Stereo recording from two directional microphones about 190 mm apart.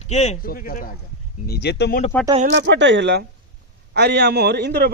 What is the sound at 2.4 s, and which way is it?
A man's voice, 70° right (ahead or behind).